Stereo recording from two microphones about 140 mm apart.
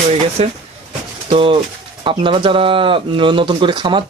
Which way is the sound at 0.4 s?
45° right (ahead or behind).